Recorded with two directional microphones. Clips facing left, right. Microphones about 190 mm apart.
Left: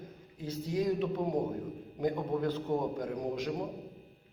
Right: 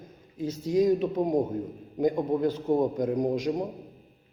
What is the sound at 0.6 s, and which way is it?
A man's voice, 15° right (ahead or behind).